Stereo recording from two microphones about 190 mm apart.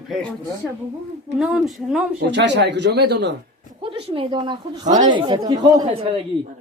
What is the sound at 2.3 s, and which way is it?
Speech, 70° right (ahead or behind).